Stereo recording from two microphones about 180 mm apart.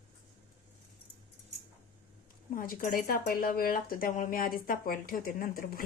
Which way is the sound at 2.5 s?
55° left (ahead or behind).